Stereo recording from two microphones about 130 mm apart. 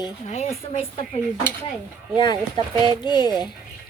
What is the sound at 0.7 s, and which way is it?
Speech, 45° left (ahead or behind).